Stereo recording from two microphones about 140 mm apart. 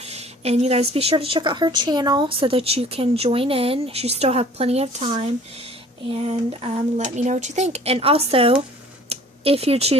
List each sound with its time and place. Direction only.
0.0 s speech: 50° right (ahead or behind)
7.0 s speech: 55° right (ahead or behind)
9.0 s a sound: 45° right (ahead or behind)